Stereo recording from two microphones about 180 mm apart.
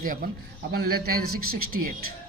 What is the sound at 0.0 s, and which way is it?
A woman's voice, 50° right (ahead or behind).